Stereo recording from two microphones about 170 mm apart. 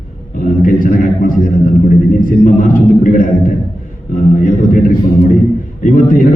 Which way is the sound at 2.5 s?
55° left (ahead or behind).